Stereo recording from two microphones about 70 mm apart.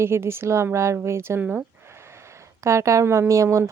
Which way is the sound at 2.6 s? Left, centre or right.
Right.